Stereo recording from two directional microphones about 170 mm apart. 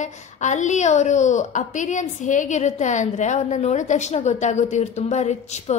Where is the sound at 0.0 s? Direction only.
45° left (ahead or behind).